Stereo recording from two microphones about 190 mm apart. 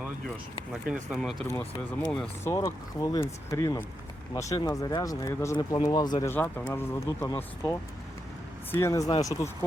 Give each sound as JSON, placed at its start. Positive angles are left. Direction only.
{"t": 1.1, "sound": "speech", "side_deg": 0}